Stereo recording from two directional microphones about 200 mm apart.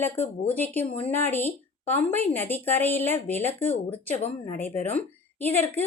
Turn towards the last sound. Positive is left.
turn(degrees=10)  # may be behind; listen again after turning